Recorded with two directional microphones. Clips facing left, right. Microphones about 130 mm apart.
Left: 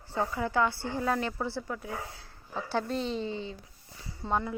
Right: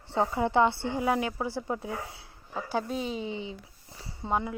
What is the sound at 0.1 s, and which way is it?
Speech, 20° right (ahead or behind).